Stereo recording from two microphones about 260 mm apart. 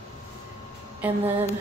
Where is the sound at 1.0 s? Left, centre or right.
Centre.